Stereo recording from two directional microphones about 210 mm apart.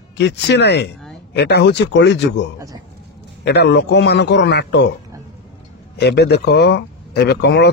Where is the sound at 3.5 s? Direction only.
50° left (ahead or behind).